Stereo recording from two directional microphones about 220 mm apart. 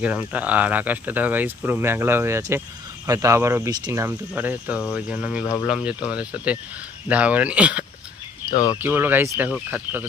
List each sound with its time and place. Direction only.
0.0 s speech: 5° right (ahead or behind)
8.5 s speech: 15° left (ahead or behind)
8.8 s speech: 10° right (ahead or behind)